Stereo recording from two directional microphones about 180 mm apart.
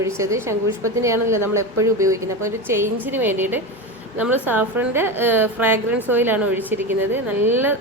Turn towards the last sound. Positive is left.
turn(degrees=-10)  # may be behind; listen again after turning